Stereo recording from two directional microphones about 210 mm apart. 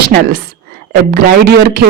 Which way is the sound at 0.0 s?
50° right (ahead or behind).